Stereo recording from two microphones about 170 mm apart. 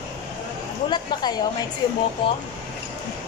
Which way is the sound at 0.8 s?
25° left (ahead or behind).